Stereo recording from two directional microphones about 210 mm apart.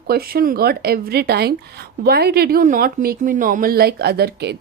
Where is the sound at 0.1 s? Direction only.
45° right (ahead or behind).